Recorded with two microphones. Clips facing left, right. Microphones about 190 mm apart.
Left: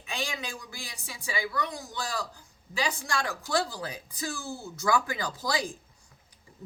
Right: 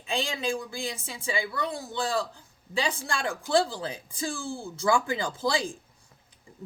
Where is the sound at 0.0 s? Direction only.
30° right (ahead or behind).